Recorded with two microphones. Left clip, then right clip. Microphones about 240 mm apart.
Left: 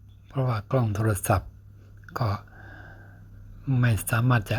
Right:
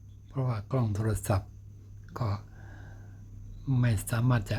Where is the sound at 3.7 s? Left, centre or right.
Centre.